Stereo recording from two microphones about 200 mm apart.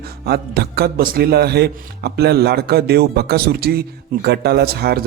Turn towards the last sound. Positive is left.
turn(degrees=-50)  # may be behind; listen again after turning